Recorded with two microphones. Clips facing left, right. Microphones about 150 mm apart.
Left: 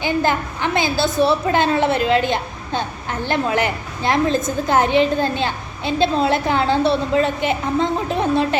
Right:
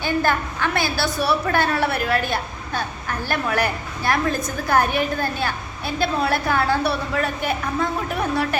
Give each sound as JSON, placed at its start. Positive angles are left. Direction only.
{"t": 0.0, "sound": "a woman's voice", "side_deg": 20}